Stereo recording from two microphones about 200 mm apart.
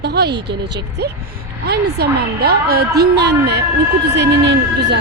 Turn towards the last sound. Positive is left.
turn(degrees=-60)  # may be behind; listen again after turning